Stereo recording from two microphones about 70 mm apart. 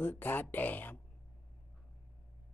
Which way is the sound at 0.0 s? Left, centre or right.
Left.